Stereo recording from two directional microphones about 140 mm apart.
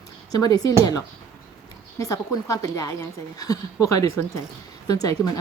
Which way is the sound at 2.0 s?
25° left (ahead or behind).